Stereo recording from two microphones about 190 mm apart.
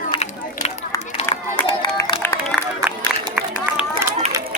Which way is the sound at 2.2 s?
10° left (ahead or behind).